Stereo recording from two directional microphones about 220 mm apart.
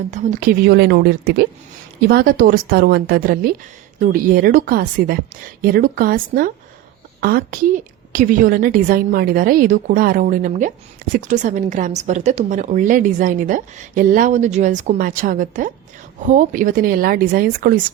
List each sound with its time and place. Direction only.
0.1 s a woman's voice: 35° right (ahead or behind)